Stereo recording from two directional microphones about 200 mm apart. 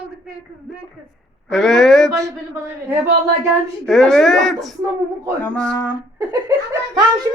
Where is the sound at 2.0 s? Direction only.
15° right (ahead or behind).